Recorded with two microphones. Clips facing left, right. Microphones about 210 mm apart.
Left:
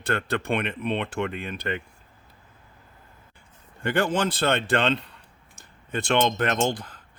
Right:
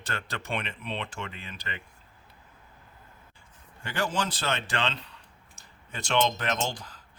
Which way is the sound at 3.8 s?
60° left (ahead or behind).